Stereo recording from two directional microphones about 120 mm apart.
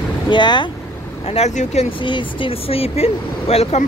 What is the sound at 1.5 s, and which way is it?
Speech, 75° left (ahead or behind).